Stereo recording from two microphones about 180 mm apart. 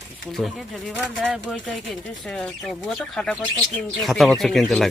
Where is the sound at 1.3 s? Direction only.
Centre (ahead or behind).